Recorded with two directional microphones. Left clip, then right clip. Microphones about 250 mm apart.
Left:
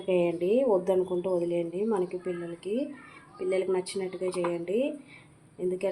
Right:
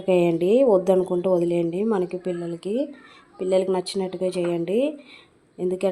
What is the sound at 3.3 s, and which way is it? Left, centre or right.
Speech, right.